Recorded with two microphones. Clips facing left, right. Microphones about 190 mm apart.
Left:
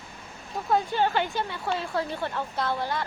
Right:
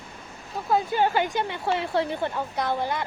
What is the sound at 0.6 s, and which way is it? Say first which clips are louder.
Speech: right 2 dB; 5° right (ahead or behind).